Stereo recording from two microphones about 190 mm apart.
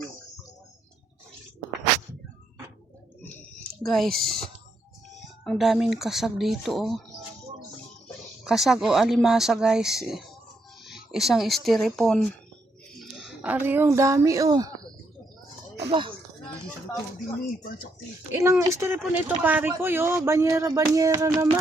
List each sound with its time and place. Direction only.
3.2 s a sound: 10° left (ahead or behind)
3.8 s speech: centre (ahead or behind)
8.4 s a woman's voice: centre (ahead or behind); by 14.7 s 20° right (ahead or behind)
15.9 s speech: 25° right (ahead or behind)
17.4 s speech: 50° left (ahead or behind)
18.3 s speech: 15° right (ahead or behind)